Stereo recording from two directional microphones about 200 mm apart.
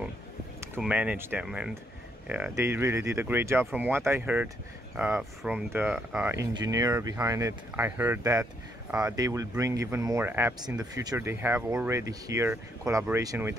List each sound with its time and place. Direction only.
0.7 s speech: 5° right (ahead or behind)
6.3 s speech: 20° right (ahead or behind)